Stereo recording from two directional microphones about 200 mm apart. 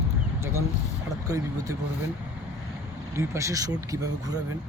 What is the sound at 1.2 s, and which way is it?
Speech, 15° right (ahead or behind).